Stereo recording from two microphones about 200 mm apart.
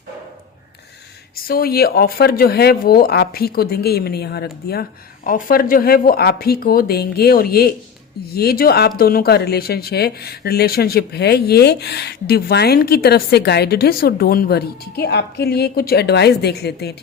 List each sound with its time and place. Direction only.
1.4 s speech: 50° left (ahead or behind)